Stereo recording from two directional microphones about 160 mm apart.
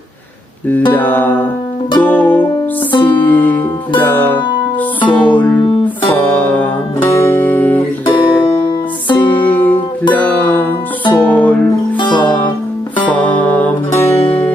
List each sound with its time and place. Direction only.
0.9 s music: 10° left (ahead or behind)
2.9 s music: 30° left (ahead or behind)
3.2 s music: 10° left (ahead or behind)
8.0 s music: 30° left (ahead or behind)
9.4 s music: 10° left (ahead or behind)
11.9 s music: 30° left (ahead or behind)
13.1 s music: 10° left (ahead or behind)